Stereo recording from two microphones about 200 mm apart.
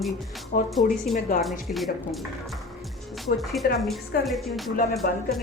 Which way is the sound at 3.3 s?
50° left (ahead or behind).